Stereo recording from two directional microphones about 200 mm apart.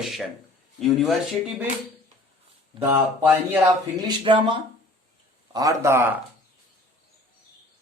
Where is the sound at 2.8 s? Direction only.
10° right (ahead or behind).